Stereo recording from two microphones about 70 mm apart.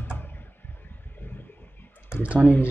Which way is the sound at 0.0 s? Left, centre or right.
Left.